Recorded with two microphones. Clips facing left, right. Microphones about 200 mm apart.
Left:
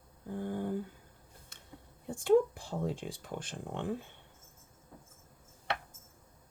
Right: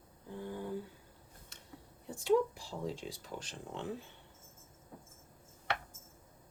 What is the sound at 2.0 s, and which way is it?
Speech, 50° left (ahead or behind).